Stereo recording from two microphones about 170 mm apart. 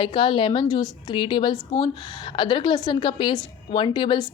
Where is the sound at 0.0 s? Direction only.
30° left (ahead or behind).